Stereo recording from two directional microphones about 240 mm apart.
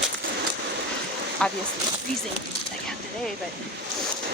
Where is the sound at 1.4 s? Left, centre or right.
Centre.